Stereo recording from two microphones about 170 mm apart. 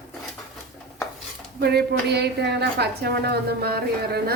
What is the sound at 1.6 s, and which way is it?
A woman's voice, 75° right (ahead or behind).